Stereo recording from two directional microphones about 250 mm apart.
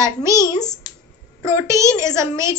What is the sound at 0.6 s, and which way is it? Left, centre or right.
Speech, centre.